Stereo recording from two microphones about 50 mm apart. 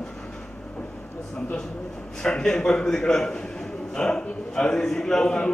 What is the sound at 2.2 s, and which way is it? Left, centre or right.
A man's voice, centre.